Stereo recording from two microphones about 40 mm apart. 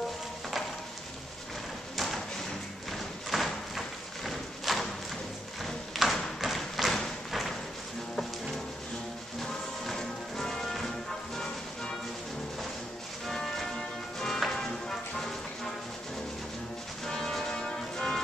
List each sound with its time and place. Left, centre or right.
2.0 s thump: centre
2.9 s a sound: centre
5.9 s thump: centre
9.4 s music: centre
13.3 s music: centre
17.0 s music: centre
17.5 s music: centre